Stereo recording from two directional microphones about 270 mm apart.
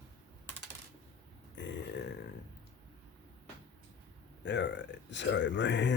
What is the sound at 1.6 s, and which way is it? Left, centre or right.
Burping, left.